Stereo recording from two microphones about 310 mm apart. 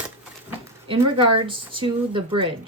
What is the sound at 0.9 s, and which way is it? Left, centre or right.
Speech, centre.